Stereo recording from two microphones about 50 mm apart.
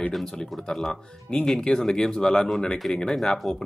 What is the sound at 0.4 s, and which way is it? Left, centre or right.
Speech, centre.